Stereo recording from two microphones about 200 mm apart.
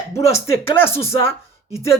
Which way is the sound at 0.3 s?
10° left (ahead or behind).